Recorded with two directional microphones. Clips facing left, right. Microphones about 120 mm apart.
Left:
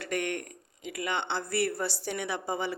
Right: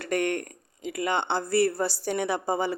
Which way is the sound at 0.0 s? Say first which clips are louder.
Right 5 dB; 45° right (ahead or behind).